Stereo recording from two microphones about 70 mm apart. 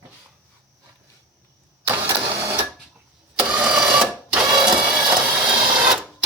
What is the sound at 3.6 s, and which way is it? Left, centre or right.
Printer, centre.